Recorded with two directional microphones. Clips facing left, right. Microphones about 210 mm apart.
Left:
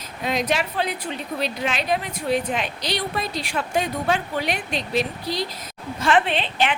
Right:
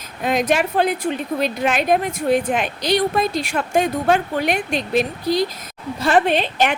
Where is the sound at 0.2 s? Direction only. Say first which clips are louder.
Right 5 dB; 50° right (ahead or behind).